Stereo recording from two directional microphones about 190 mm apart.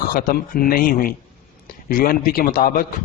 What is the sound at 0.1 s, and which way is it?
A man's voice, 50° left (ahead or behind).